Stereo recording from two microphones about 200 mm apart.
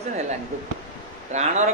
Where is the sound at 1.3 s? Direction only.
35° right (ahead or behind).